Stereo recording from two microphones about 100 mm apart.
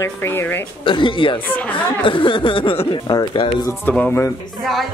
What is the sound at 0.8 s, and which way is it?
Speech, 55° left (ahead or behind).